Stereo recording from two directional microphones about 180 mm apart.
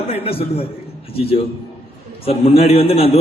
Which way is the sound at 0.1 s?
35° left (ahead or behind).